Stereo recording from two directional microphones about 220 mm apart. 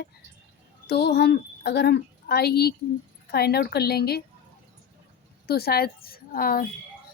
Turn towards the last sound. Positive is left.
turn(degrees=40)  # may be behind; listen again after turning